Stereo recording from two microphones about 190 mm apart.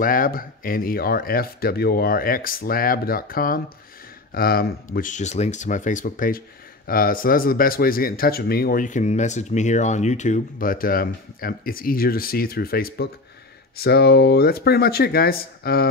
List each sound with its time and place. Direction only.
0.0 s speech: 45° left (ahead or behind)
4.9 s speech: 40° left (ahead or behind)